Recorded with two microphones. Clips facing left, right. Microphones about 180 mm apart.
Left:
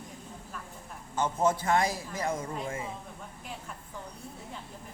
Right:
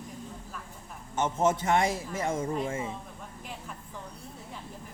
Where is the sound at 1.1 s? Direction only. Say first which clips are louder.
Right 1 dB; 20° right (ahead or behind).